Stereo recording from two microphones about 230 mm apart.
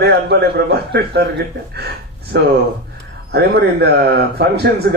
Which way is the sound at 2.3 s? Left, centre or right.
Right.